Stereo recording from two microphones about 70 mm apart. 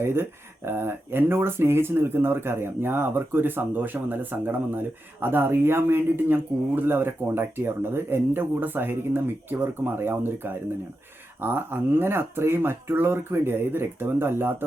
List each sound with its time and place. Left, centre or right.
0.0 s speech: right